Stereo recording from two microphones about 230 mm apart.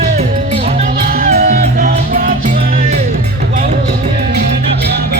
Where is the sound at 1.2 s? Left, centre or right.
Right.